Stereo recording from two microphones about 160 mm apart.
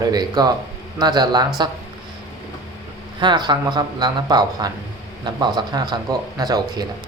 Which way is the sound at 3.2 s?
30° right (ahead or behind).